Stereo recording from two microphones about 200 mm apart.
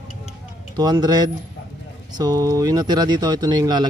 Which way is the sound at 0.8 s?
20° right (ahead or behind).